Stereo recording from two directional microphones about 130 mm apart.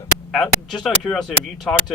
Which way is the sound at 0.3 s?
5° left (ahead or behind).